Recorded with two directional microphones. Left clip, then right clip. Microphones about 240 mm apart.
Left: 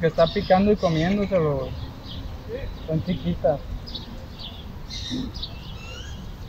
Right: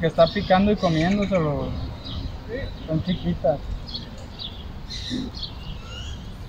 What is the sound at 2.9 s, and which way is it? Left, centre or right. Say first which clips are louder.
Speech: even; centre.